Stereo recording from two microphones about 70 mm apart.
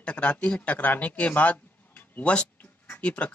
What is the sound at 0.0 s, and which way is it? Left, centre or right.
Speech, centre.